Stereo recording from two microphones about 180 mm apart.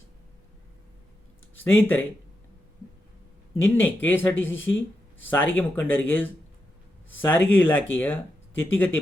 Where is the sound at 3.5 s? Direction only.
10° left (ahead or behind).